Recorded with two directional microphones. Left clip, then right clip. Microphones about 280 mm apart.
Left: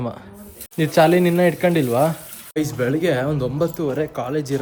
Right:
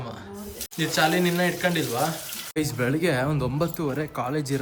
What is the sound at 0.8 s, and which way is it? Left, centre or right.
Speech, centre.